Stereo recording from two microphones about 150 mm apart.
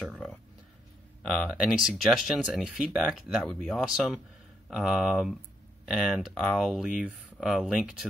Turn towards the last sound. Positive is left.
turn(degrees=-5)  # may be behind; listen again after turning